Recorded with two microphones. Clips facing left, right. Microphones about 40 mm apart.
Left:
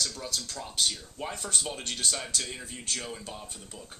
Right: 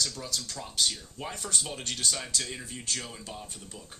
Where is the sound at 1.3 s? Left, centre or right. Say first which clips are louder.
Even; left.